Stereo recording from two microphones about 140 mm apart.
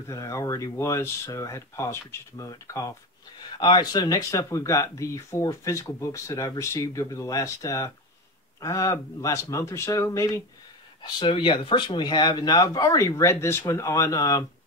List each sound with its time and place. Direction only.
0.1 s speech: 25° left (ahead or behind)
11.0 s speech: 35° left (ahead or behind)